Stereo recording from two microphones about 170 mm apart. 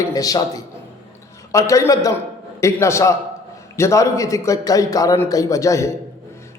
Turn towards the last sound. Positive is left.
turn(degrees=20)  # may be behind; listen again after turning